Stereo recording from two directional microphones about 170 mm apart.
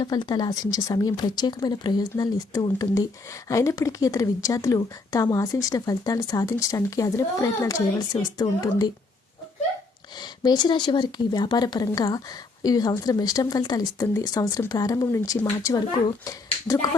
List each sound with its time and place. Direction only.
0.0 s speech: 25° left (ahead or behind)
10.2 s speech: 25° left (ahead or behind)